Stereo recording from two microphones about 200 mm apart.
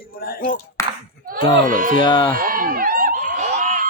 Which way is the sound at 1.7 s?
45° right (ahead or behind).